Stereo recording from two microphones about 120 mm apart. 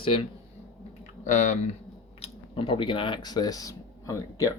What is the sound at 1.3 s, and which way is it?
Speech, 80° left.